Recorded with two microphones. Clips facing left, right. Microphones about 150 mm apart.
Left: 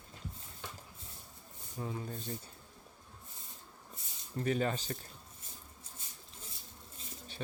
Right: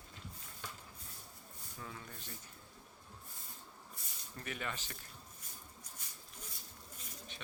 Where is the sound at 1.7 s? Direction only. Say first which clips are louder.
Left 10 dB; 30° left (ahead or behind).